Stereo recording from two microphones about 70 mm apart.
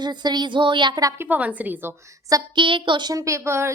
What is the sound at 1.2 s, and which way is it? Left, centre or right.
Speech, right.